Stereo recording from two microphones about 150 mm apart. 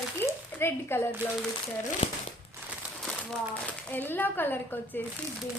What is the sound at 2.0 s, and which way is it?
Speech, 40° left (ahead or behind).